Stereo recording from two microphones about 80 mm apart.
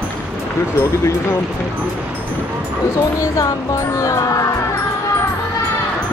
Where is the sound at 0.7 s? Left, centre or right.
Left.